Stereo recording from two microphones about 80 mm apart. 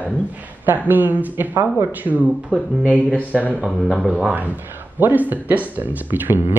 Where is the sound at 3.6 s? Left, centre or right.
Centre.